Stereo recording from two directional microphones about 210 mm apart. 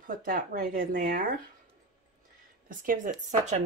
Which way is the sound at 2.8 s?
40° right (ahead or behind).